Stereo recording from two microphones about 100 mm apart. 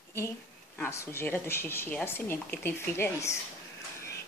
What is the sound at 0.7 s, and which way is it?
Speech, 25° left (ahead or behind).